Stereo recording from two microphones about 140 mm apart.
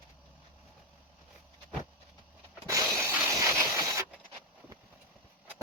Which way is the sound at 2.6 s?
20° right (ahead or behind).